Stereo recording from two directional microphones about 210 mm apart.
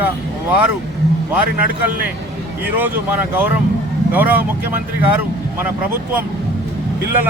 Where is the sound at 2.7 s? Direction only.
10° right (ahead or behind).